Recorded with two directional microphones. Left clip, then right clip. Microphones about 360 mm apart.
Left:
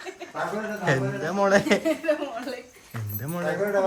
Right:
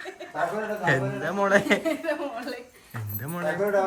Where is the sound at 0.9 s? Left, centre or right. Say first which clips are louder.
Even; centre.